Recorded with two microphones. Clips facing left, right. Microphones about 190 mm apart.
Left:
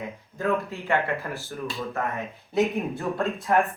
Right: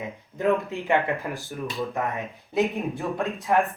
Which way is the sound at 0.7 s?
15° right (ahead or behind).